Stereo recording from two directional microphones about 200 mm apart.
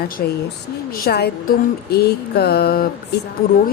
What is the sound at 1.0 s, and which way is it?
A woman's voice, 50° left (ahead or behind).